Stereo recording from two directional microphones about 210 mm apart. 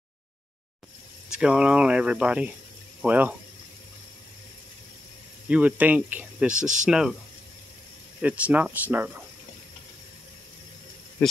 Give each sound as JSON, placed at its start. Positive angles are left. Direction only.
{"t": 1.3, "sound": "speech", "side_deg": -5}
{"t": 5.5, "sound": "speech", "side_deg": -5}
{"t": 6.6, "sound": "speech", "side_deg": -35}
{"t": 6.9, "sound": "speech", "side_deg": -5}
{"t": 8.2, "sound": "speech", "side_deg": -5}